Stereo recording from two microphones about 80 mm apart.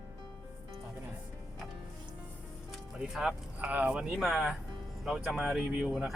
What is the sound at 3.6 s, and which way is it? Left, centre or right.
Speech, centre.